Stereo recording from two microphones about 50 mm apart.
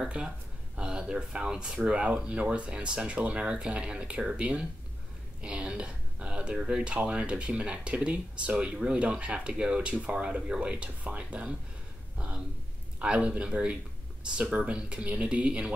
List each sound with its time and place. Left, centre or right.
0.0 s speech: centre